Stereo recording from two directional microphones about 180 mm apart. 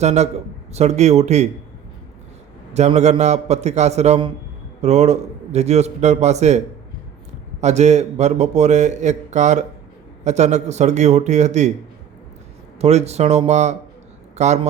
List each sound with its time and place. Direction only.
0.0 s speech: 40° right (ahead or behind)
2.7 s speech: 40° right (ahead or behind)
7.6 s speech: 40° right (ahead or behind)
12.8 s speech: 35° right (ahead or behind)